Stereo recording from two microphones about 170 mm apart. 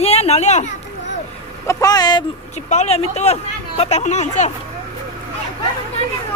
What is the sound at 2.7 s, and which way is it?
Speech, 40° left (ahead or behind).